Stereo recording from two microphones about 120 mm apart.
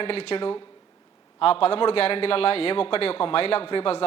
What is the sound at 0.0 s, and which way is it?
A man's voice, 55° left (ahead or behind).